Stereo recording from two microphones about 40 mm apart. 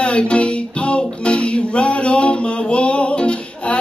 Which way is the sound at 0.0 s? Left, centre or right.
Left.